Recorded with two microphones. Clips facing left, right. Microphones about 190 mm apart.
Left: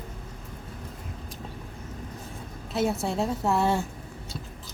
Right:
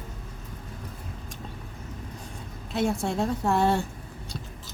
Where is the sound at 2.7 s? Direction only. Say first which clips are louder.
Even; 5° left (ahead or behind).